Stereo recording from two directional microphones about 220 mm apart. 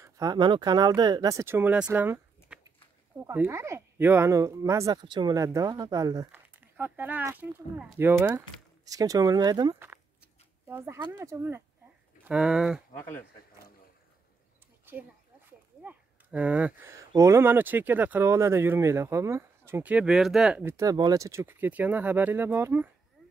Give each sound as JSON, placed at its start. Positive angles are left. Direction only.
{"t": 0.0, "sound": "speech", "side_deg": -15}
{"t": 15.8, "sound": "speech", "side_deg": -5}